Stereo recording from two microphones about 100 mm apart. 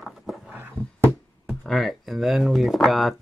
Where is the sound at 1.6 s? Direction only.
Centre (ahead or behind).